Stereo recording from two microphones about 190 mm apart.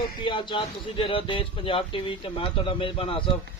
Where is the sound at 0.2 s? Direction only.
25° left (ahead or behind).